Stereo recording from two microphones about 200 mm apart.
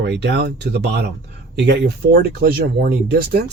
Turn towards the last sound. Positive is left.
turn(degrees=-50)  # may be behind; listen again after turning